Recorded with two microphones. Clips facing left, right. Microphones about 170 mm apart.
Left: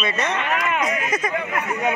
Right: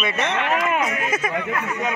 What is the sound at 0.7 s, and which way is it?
Speech, 5° right (ahead or behind).